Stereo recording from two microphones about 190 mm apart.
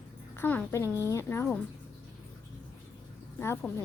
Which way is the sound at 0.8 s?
15° right (ahead or behind).